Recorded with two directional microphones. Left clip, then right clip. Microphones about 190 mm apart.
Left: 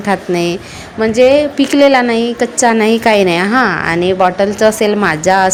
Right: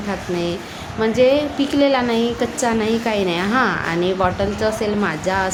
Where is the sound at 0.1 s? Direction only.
40° left (ahead or behind).